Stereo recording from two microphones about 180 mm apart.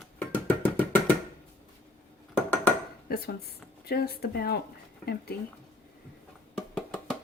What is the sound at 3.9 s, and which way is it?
Speech, 60° left (ahead or behind).